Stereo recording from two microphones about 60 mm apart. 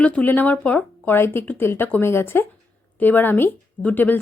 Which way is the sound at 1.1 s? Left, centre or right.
Left.